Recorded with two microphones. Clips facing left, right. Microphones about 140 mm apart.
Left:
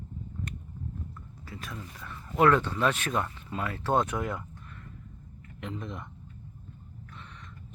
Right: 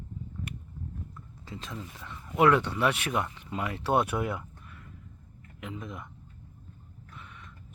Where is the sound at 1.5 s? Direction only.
20° right (ahead or behind).